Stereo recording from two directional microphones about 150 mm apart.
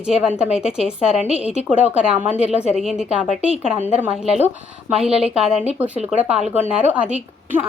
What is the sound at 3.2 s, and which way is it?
Speech, 50° left (ahead or behind).